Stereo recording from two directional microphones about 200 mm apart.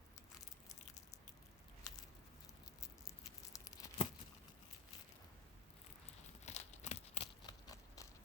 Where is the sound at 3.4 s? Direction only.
15° left (ahead or behind).